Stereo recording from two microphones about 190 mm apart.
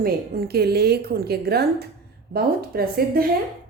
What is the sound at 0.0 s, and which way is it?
A woman's voice, 55° right (ahead or behind).